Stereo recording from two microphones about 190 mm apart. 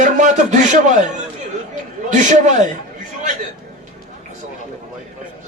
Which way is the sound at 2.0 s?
40° right (ahead or behind).